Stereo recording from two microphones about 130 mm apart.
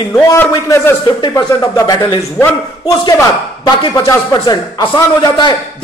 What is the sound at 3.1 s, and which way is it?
A man's voice, 30° left (ahead or behind).